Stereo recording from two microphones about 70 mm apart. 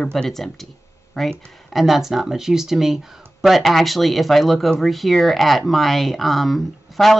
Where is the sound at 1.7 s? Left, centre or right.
Centre.